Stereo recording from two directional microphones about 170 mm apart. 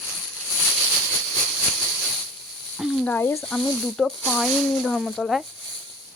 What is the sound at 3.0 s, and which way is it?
Speech, 10° left (ahead or behind).